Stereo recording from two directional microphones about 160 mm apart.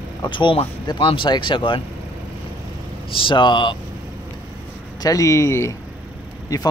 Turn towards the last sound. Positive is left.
turn(degrees=20)  # may be behind; listen again after turning